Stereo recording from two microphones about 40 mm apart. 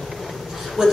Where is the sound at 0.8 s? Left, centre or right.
Centre.